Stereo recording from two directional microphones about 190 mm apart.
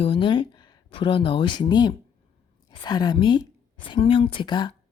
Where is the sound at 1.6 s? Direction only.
20° left (ahead or behind).